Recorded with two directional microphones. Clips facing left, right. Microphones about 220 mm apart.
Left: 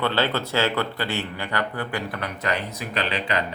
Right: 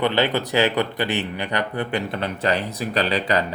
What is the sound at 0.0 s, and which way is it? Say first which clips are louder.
Speech: right 3 dB; 15° right (ahead or behind).